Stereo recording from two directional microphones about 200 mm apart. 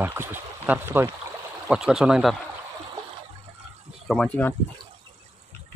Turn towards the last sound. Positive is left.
turn(degrees=5)  # may be behind; listen again after turning